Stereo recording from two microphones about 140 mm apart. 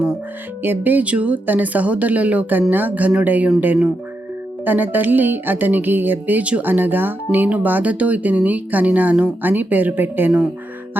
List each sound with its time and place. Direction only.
0.6 s speech: 15° right (ahead or behind)